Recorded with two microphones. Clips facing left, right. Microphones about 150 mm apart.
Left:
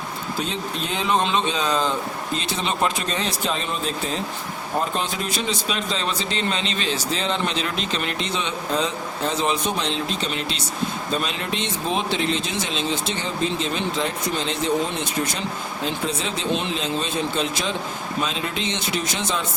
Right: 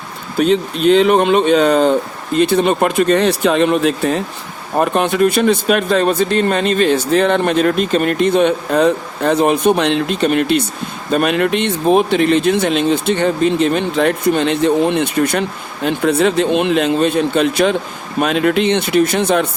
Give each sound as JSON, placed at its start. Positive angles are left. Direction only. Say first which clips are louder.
{"t": 0.3, "sound": "speech", "louder": "right 15 dB", "side_deg": -65}